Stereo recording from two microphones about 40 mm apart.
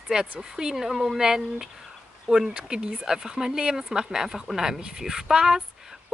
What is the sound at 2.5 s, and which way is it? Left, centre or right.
Speech, right.